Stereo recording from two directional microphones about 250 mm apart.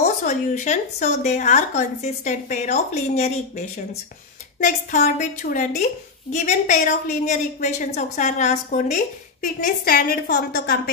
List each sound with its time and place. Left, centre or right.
0.0 s a woman's voice: left